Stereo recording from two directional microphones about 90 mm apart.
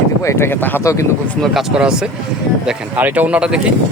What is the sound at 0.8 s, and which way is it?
Speech, 35° left (ahead or behind).